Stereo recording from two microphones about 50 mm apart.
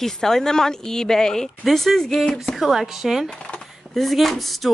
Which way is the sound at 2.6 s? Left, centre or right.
Centre.